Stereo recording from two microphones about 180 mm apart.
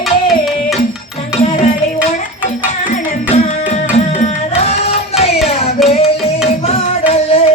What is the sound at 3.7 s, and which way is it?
Music, 40° left (ahead or behind).